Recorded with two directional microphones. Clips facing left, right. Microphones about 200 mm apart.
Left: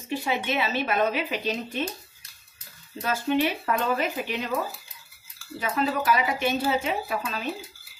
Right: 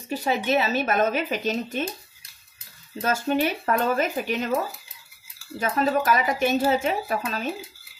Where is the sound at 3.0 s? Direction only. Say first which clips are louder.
Right 1 dB; 45° right (ahead or behind).